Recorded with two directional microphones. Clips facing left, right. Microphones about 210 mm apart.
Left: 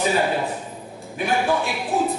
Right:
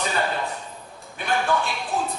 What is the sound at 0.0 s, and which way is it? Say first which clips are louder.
A man's voice: left 5 dB; 10° left (ahead or behind).